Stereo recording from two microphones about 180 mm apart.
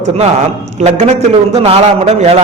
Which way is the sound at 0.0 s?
40° right (ahead or behind).